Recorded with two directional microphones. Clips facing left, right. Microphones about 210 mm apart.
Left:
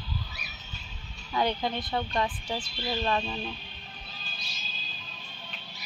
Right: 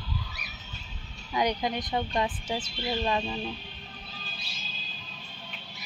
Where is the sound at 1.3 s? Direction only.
15° right (ahead or behind).